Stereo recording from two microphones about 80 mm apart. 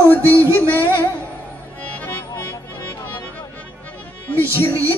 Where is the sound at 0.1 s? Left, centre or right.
Left.